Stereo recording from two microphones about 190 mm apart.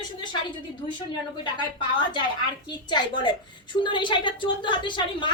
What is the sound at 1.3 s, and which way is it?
A woman's voice, 25° left (ahead or behind).